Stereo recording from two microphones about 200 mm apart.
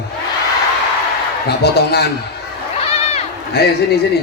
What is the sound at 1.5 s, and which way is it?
Speech, 55° left (ahead or behind).